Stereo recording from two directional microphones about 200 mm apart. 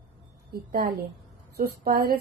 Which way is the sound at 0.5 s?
50° right (ahead or behind).